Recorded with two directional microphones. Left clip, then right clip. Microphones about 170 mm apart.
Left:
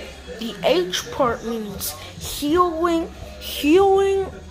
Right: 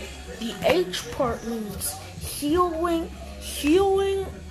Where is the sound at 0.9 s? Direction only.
15° left (ahead or behind).